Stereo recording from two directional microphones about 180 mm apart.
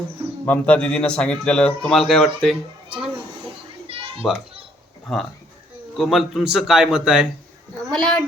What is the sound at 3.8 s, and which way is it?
Children playing, 30° right (ahead or behind).